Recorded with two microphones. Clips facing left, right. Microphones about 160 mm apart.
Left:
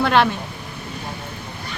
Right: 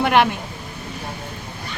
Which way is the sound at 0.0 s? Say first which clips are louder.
Even; 15° right (ahead or behind).